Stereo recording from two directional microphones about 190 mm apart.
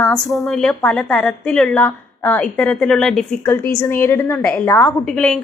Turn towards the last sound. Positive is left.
turn(degrees=5)  # may be behind; listen again after turning